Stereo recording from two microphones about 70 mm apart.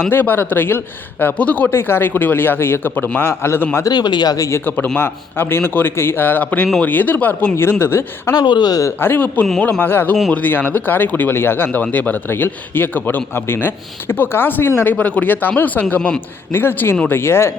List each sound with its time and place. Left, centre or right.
0.1 s a man's voice: left
1.7 s a man's voice: left
3.8 s speech: left
4.4 s speech: left
4.9 s a man's voice: left
7.5 s a man's voice: left
8.3 s speech: left
9.0 s a man's voice: left
14.8 s a man's voice: centre
16.0 s a man's voice: centre
16.5 s a man's voice: left